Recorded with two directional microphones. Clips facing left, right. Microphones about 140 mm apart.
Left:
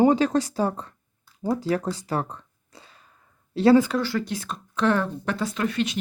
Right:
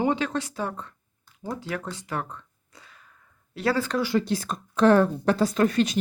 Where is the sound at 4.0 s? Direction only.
15° right (ahead or behind).